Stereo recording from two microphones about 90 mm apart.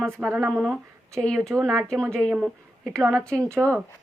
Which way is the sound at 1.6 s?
35° right (ahead or behind).